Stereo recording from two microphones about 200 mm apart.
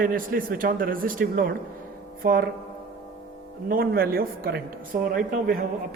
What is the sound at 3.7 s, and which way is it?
Speech, 50° right (ahead or behind).